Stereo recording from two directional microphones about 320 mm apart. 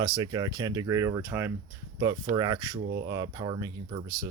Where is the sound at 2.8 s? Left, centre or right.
Right.